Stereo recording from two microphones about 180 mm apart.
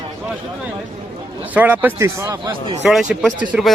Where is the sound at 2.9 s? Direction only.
Centre (ahead or behind).